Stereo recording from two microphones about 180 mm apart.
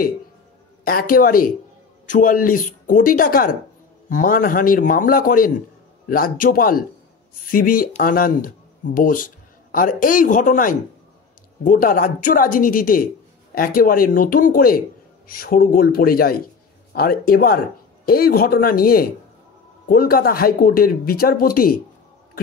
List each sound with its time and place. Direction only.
0.8 s a woman's voice: 55° left (ahead or behind)